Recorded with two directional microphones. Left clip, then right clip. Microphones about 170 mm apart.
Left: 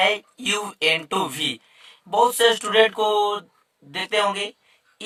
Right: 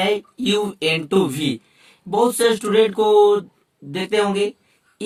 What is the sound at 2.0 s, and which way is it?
A woman's voice, 25° left (ahead or behind).